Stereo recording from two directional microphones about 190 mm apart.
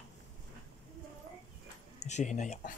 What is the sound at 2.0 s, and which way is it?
Speech, 40° left (ahead or behind).